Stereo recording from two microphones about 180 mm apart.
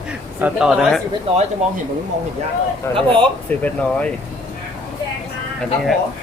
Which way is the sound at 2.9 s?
15° left (ahead or behind).